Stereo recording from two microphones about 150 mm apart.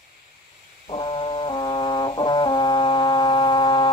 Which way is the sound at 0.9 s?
35° left (ahead or behind).